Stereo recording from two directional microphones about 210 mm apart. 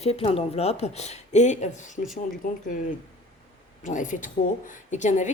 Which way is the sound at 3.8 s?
35° left (ahead or behind).